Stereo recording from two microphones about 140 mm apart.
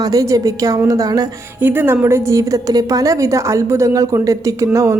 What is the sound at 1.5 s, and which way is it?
A woman's voice, 15° right (ahead or behind).